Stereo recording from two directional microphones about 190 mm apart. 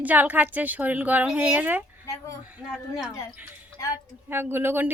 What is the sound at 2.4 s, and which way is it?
Speech, 5° right (ahead or behind).